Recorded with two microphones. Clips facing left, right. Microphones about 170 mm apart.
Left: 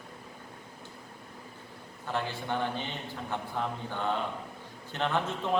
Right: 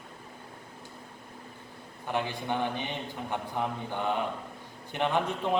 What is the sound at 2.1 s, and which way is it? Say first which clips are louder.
A man's voice: right 2 dB; 15° right (ahead or behind).